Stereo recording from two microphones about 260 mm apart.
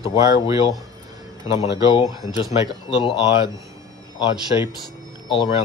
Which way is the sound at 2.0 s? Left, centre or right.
Centre.